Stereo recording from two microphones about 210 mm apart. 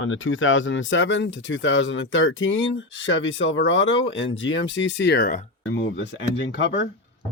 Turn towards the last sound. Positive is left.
turn(degrees=55)  # may be behind; listen again after turning